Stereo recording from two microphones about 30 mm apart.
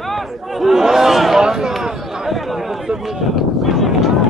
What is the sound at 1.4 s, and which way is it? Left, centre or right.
Speech, right.